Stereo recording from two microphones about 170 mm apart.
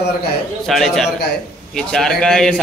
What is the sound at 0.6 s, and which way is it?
A man's voice, centre (ahead or behind).